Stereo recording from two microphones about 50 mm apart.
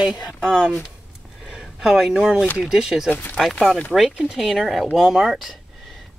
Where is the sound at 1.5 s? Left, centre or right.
Centre.